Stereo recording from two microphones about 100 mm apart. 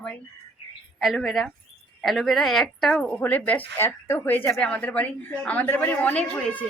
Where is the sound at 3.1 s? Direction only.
15° left (ahead or behind).